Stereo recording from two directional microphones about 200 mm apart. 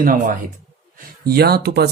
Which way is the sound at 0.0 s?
45° right (ahead or behind).